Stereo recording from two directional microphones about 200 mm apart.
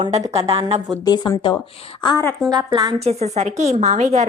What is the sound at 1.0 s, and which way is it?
A woman's voice, 20° left (ahead or behind).